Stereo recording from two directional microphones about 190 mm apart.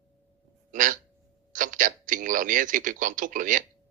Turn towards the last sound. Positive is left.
turn(degrees=-45)  # may be behind; listen again after turning